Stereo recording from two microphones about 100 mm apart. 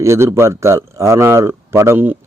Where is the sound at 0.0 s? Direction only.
30° right (ahead or behind).